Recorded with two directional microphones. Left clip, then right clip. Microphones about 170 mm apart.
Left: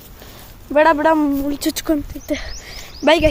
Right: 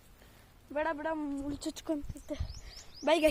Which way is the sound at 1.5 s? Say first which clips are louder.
Left 17 dB; centre (ahead or behind).